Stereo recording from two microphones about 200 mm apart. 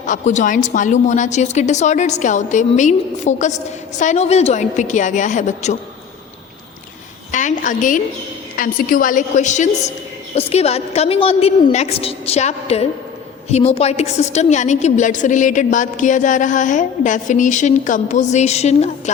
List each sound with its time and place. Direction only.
0.0 s a woman's voice: 40° left (ahead or behind)
7.3 s a woman's voice: 40° left (ahead or behind)